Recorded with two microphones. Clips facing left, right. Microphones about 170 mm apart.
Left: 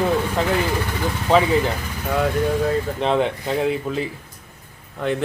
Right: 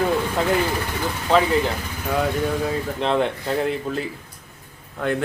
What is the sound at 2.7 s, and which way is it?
Speech, centre (ahead or behind).